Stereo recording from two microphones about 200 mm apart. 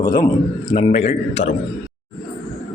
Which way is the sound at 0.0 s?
20° left (ahead or behind).